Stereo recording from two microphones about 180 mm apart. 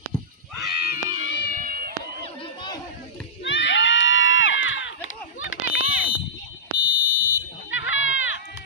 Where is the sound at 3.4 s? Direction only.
90° left.